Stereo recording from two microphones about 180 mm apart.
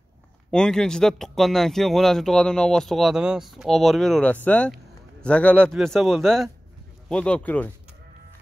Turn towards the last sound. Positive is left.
turn(degrees=10)  # may be behind; listen again after turning